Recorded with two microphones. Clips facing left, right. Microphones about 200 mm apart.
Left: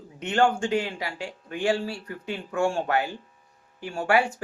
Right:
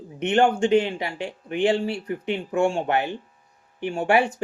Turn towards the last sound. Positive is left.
turn(degrees=-20)  # may be behind; listen again after turning